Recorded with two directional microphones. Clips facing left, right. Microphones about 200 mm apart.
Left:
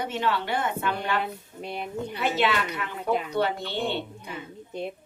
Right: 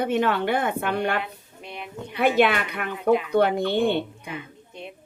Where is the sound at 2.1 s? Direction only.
55° right (ahead or behind).